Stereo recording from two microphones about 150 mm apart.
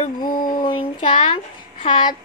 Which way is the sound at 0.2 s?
70° left (ahead or behind).